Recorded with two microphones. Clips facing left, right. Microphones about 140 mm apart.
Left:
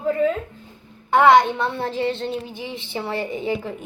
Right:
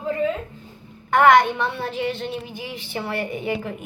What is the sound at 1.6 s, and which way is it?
A woman's voice, 35° left (ahead or behind).